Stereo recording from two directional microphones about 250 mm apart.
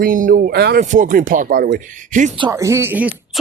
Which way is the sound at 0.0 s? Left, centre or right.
Right.